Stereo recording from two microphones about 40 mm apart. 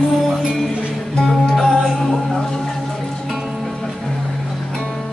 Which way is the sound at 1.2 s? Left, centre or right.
Centre.